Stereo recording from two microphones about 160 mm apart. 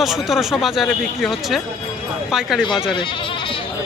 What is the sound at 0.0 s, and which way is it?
Speech, centre (ahead or behind).